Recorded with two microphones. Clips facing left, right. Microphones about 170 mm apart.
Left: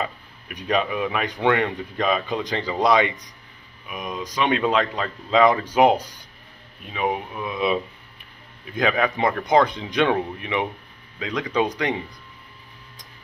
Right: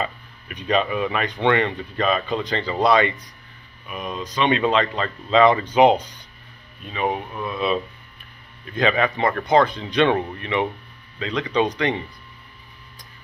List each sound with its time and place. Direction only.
0.7 s speech: 5° left (ahead or behind)
7.4 s speech: 15° left (ahead or behind)
10.0 s speech: centre (ahead or behind)